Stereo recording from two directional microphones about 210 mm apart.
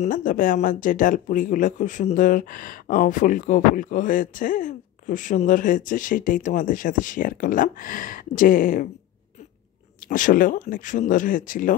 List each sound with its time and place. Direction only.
0.0 s speech: 40° left (ahead or behind)
10.0 s speech: 40° left (ahead or behind)